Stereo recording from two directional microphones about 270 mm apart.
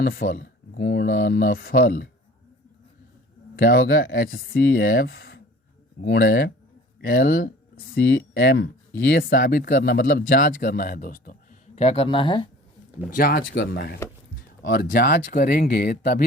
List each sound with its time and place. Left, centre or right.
0.0 s speech: left
3.5 s speech: left; by 12.5 s centre
13.1 s speech: left